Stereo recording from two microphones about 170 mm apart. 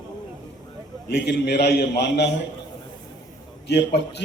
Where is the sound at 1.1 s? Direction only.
75° left (ahead or behind).